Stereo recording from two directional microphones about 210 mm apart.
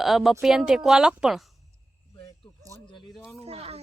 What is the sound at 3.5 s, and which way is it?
Speech, 30° right (ahead or behind).